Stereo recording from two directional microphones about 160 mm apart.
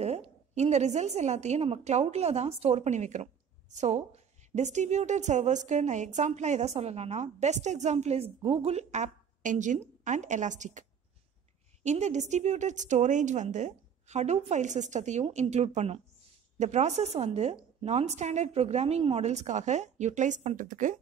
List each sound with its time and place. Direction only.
0.0 s a woman's voice: 40° right (ahead or behind)